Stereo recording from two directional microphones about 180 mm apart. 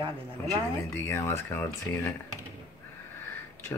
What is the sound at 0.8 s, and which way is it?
A man's voice, 15° left (ahead or behind).